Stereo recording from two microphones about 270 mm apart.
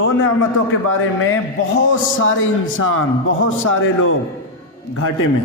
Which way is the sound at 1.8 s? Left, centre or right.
Left.